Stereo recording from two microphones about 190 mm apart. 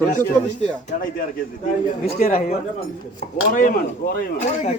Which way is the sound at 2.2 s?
45° left (ahead or behind).